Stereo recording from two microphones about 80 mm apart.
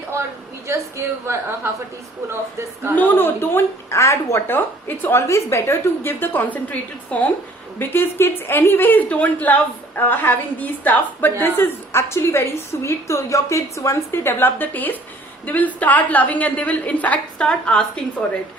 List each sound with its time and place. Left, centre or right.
0.7 s a woman's voice: right
2.9 s a woman's voice: left